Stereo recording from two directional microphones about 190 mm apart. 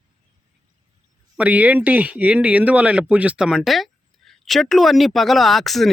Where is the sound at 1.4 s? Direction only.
5° right (ahead or behind).